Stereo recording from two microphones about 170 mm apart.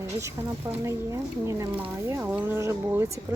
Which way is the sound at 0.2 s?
15° right (ahead or behind).